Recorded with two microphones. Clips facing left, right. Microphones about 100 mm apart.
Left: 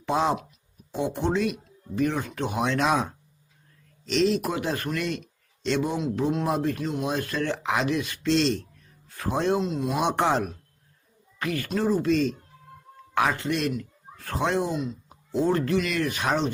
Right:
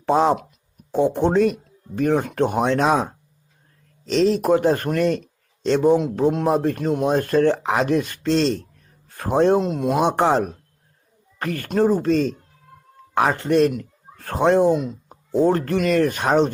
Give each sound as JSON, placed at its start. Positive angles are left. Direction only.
{"t": 0.0, "sound": "a man's voice", "side_deg": -40}
{"t": 9.9, "sound": "speech", "side_deg": -35}
{"t": 14.8, "sound": "a sound", "side_deg": -50}
{"t": 15.4, "sound": "speech", "side_deg": -45}